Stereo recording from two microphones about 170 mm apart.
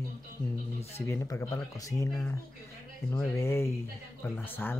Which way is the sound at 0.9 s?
15° left (ahead or behind).